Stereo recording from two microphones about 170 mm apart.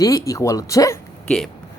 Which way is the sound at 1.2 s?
5° left (ahead or behind).